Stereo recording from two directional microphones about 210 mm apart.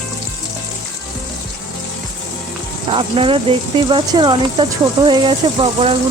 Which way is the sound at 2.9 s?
25° right (ahead or behind).